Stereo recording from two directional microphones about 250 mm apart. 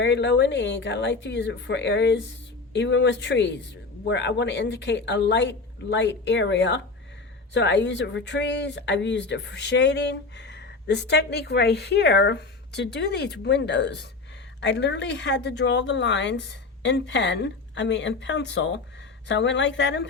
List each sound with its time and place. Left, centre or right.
0.0 s speech: left